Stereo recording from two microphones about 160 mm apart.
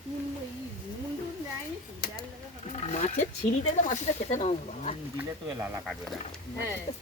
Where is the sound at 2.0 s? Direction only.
70° left (ahead or behind).